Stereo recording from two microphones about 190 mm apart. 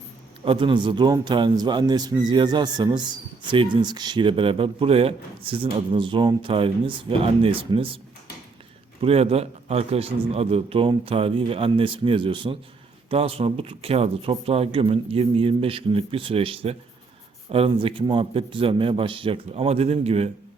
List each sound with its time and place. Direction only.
0.4 s a man's voice: 25° right (ahead or behind)
9.0 s a man's voice: 30° right (ahead or behind)